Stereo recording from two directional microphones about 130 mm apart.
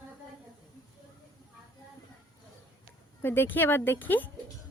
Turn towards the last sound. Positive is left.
turn(degrees=15)  # may be behind; listen again after turning